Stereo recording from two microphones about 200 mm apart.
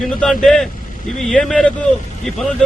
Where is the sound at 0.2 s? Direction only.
5° left (ahead or behind).